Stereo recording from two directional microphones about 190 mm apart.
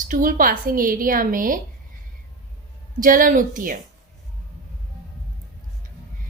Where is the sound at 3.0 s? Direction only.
45° right (ahead or behind).